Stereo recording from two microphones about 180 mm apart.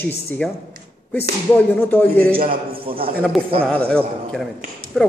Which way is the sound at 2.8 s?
30° right (ahead or behind).